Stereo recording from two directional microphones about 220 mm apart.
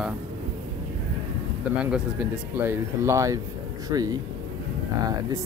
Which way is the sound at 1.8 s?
5° right (ahead or behind).